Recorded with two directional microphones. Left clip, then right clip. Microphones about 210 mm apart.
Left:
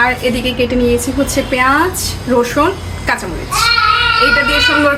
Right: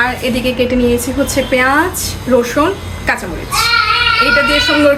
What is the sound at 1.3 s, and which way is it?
A woman's voice, 10° right (ahead or behind).